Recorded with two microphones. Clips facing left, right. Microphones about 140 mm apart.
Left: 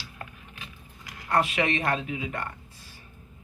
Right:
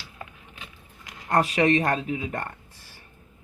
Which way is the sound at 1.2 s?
40° right (ahead or behind).